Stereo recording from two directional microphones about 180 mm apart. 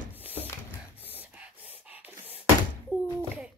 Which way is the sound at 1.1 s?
10° right (ahead or behind).